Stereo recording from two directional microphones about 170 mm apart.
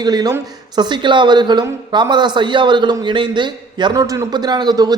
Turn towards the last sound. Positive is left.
turn(degrees=-25)  # may be behind; listen again after turning